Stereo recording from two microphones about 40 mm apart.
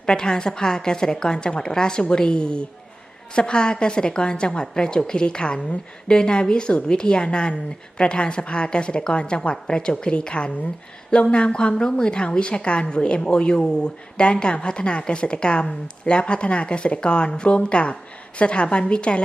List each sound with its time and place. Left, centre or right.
0.0 s a woman's voice: centre